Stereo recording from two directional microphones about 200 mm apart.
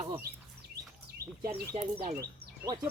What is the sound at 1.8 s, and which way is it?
Speech, 30° right (ahead or behind).